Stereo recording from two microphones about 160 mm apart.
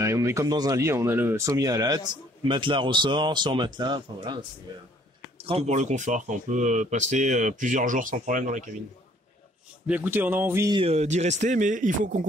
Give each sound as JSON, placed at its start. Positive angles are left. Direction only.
{"t": 0.0, "sound": "speech", "side_deg": -20}
{"t": 5.4, "sound": "speech", "side_deg": -40}
{"t": 9.8, "sound": "speech", "side_deg": -10}
{"t": 10.7, "sound": "speech", "side_deg": -35}